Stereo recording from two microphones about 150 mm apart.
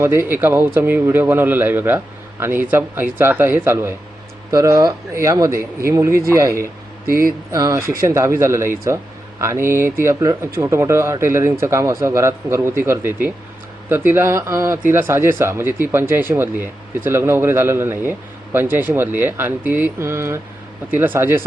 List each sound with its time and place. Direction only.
0.0 s a man's voice: 15° right (ahead or behind)
7.1 s speech: 70° right (ahead or behind)
7.5 s a man's voice: 20° right (ahead or behind)